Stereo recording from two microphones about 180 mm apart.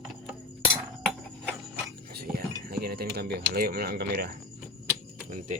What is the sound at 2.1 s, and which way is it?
Speech, 55° right (ahead or behind).